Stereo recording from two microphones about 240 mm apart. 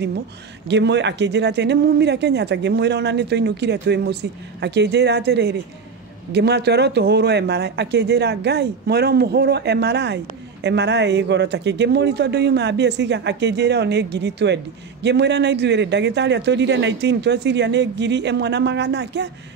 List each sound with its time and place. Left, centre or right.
0.7 s a man's voice: right